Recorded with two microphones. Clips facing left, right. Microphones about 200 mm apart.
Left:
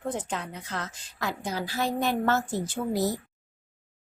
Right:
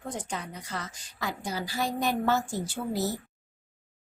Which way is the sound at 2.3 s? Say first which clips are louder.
Left 1 dB; 5° left (ahead or behind).